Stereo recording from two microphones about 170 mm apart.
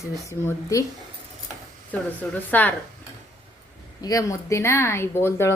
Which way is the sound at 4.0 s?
20° left (ahead or behind).